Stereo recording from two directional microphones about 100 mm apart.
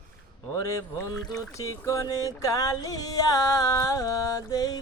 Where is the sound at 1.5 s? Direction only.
30° left (ahead or behind).